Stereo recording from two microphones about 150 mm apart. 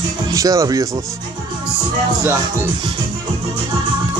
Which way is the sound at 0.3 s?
20° right (ahead or behind).